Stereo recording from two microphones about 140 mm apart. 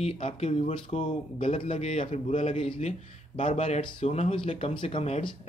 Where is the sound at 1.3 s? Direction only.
40° left (ahead or behind).